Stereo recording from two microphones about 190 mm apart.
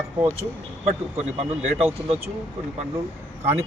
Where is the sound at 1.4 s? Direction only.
30° right (ahead or behind).